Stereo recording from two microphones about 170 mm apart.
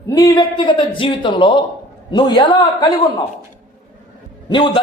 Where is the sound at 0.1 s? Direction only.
20° left (ahead or behind).